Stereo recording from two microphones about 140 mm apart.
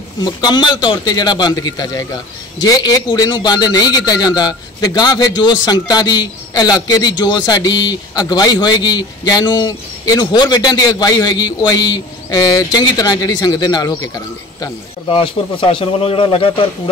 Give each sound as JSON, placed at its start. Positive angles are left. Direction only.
{"t": 0.2, "sound": "speech", "side_deg": 30}
{"t": 15.0, "sound": "speech", "side_deg": 40}